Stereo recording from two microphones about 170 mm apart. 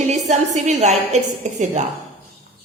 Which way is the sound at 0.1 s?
45° right (ahead or behind).